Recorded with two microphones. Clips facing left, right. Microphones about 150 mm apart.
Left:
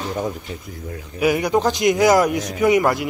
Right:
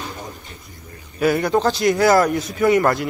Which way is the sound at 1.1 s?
10° left (ahead or behind).